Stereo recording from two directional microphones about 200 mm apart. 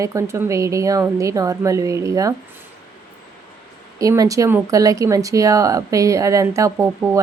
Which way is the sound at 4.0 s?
15° right (ahead or behind).